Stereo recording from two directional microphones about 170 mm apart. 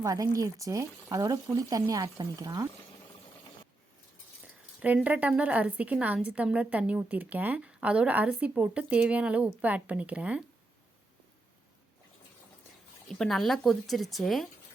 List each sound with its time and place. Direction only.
0.0 s speech: 20° right (ahead or behind)
4.8 s a woman's voice: 10° right (ahead or behind)
13.1 s speech: centre (ahead or behind)